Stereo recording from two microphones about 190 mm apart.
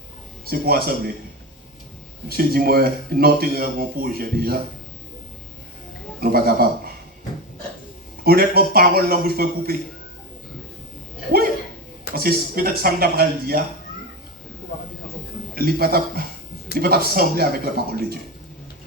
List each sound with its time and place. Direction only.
0.6 s a man's voice: 55° right (ahead or behind)
2.3 s a man's voice: 55° right (ahead or behind)
6.1 s a man's voice: 50° right (ahead or behind)
8.2 s a man's voice: 55° right (ahead or behind)
12.1 s a man's voice: 50° right (ahead or behind)
15.5 s a man's voice: 55° right (ahead or behind)